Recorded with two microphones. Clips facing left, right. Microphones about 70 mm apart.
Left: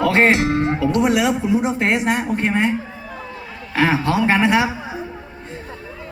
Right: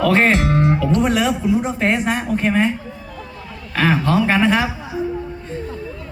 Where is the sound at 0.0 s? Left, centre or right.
Centre.